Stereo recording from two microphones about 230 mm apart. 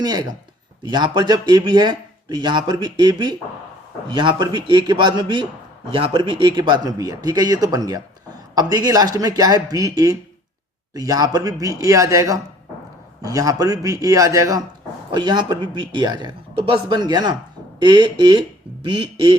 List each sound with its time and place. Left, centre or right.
0.0 s speech: centre